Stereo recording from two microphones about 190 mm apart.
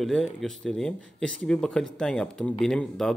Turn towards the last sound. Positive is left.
turn(degrees=5)  # may be behind; listen again after turning